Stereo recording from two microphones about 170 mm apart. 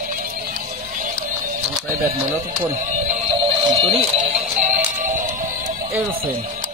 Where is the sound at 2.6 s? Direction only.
35° right (ahead or behind).